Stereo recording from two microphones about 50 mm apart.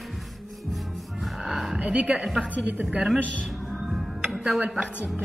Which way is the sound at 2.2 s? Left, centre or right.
Centre.